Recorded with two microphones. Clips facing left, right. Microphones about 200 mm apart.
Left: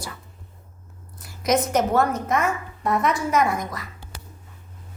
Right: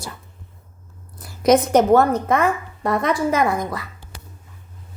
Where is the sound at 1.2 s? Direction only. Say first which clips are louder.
Right 6 dB; 30° right (ahead or behind).